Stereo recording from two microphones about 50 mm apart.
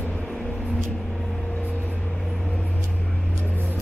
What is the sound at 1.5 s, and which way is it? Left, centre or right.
Vehicle, left.